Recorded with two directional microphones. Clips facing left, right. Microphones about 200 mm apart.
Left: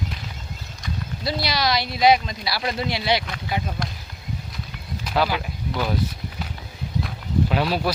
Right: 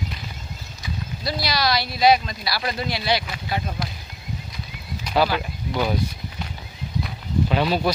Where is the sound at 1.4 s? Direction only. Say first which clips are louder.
Right 1 dB; 20° left (ahead or behind).